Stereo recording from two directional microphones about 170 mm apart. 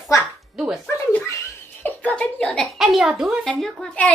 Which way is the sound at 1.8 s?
10° left (ahead or behind).